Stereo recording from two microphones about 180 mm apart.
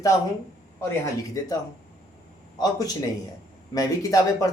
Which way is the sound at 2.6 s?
20° left (ahead or behind).